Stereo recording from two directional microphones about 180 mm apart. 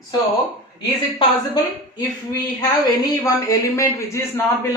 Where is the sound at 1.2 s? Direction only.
25° left (ahead or behind).